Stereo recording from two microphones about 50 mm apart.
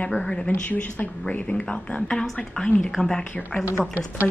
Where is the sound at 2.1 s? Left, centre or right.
Centre.